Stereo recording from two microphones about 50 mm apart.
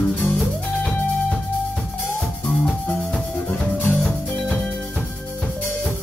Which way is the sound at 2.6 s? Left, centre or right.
Left.